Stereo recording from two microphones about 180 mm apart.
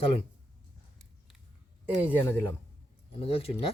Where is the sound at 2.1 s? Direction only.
10° left (ahead or behind).